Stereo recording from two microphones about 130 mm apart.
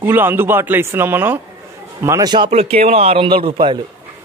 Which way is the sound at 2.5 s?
50° right (ahead or behind).